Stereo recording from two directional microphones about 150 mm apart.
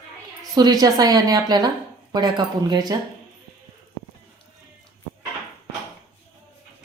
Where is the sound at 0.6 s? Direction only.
25° right (ahead or behind).